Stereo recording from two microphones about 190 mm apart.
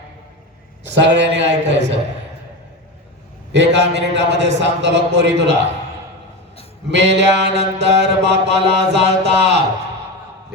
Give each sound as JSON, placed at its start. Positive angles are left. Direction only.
{"t": 0.9, "sound": "a man's voice", "side_deg": -70}
{"t": 3.5, "sound": "mantra", "side_deg": -65}
{"t": 4.6, "sound": "a man's voice", "side_deg": -70}
{"t": 6.9, "sound": "mantra", "side_deg": -65}